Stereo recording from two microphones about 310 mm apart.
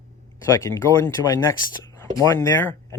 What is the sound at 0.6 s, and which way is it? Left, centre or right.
Speech, centre.